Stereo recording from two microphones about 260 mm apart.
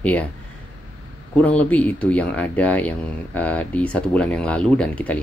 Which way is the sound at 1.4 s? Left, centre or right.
Centre.